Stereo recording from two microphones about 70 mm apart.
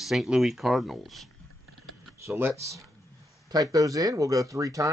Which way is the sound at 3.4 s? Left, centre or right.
Right.